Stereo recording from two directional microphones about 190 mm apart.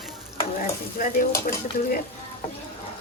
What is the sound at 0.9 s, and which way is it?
Stir, 45° left (ahead or behind).